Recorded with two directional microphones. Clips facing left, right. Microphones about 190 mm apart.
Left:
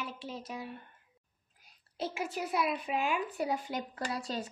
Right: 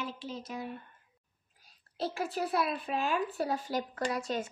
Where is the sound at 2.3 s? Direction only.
15° left (ahead or behind).